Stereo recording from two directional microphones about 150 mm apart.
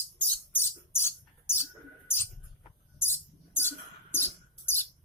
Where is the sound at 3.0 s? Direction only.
15° left (ahead or behind).